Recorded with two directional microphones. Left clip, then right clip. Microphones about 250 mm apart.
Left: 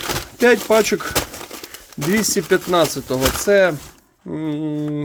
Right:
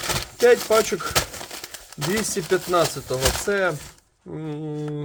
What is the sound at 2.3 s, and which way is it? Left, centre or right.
Speech, left.